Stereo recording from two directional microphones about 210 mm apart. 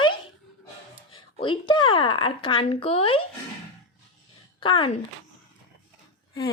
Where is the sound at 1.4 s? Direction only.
25° left (ahead or behind).